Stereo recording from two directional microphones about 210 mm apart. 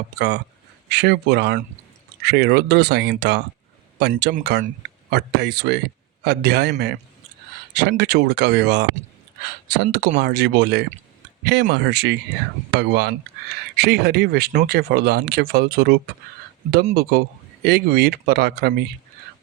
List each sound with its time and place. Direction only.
0.9 s speech: 50° right (ahead or behind)